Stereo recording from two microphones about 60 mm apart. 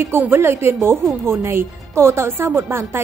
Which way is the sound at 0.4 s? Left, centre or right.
Right.